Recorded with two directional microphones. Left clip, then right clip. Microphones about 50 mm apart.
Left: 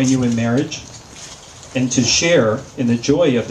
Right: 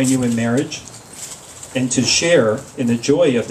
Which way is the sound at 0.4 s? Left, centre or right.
Right.